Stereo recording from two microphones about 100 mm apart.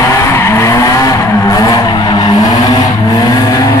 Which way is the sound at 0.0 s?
30° left (ahead or behind).